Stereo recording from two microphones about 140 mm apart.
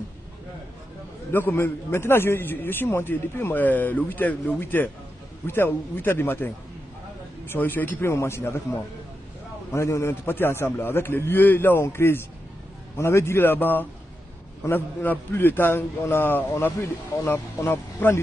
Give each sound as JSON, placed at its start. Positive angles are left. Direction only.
{"t": 1.3, "sound": "a man's voice", "side_deg": 15}
{"t": 9.7, "sound": "a man's voice", "side_deg": 20}